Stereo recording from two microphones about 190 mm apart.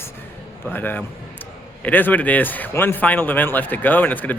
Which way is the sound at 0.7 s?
10° left (ahead or behind).